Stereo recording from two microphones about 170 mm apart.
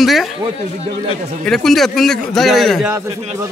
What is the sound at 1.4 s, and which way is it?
A man's voice, centre (ahead or behind).